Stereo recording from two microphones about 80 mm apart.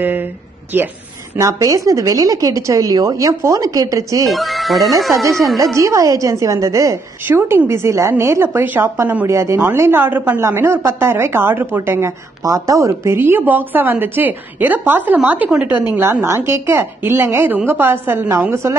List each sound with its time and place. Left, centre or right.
0.7 s a woman's voice: right
1.4 s speech: right
4.3 s speech: centre
5.8 s a woman's voice: right
7.2 s a woman's voice: right
9.3 s a woman's voice: right; by 15.8 s centre
16.0 s a woman's voice: right